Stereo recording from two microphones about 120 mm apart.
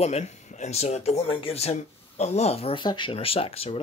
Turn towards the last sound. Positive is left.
turn(degrees=55)  # may be behind; listen again after turning